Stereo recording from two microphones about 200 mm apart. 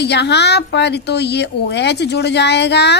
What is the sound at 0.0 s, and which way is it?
Speech, 55° left (ahead or behind).